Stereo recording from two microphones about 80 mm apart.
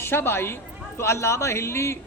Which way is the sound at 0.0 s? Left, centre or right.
Left.